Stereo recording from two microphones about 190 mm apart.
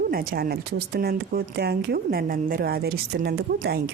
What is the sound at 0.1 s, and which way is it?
Speech, 50° right (ahead or behind).